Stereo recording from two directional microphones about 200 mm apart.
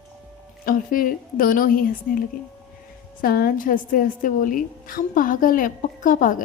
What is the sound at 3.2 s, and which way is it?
A woman's voice, 50° left (ahead or behind).